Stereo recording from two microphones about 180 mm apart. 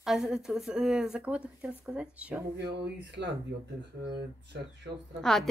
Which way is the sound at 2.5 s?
70° right (ahead or behind).